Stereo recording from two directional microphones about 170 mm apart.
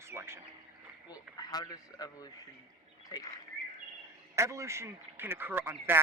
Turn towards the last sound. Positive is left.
turn(degrees=-10)  # may be behind; listen again after turning